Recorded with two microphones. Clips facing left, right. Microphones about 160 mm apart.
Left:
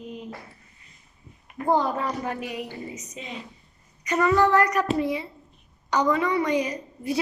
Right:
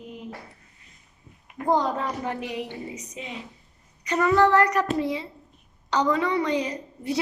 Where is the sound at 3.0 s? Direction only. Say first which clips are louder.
Right 1 dB; 10° right (ahead or behind).